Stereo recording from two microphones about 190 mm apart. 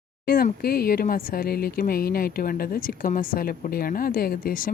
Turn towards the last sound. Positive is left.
turn(degrees=50)  # may be behind; listen again after turning